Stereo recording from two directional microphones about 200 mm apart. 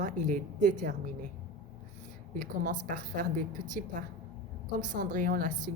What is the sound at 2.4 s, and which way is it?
Speech, 40° right (ahead or behind).